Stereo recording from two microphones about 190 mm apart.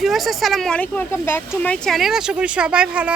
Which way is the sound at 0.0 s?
Centre (ahead or behind).